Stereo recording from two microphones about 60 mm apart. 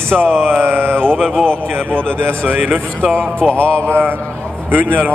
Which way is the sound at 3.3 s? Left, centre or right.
Centre.